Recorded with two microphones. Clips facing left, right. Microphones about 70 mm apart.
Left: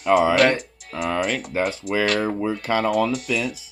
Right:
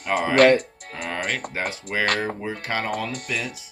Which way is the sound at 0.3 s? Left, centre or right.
Right.